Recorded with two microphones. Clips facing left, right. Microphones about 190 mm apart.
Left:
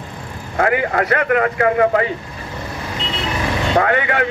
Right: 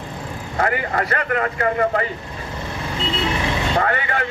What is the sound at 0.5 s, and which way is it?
Speech, 55° left (ahead or behind).